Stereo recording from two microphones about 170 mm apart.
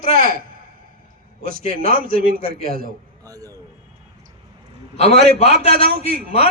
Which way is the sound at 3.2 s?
20° right (ahead or behind).